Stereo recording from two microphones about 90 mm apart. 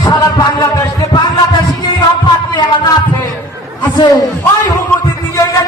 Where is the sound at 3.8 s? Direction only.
50° left (ahead or behind).